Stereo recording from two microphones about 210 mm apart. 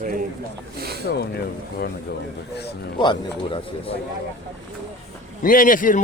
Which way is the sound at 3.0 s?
25° left (ahead or behind).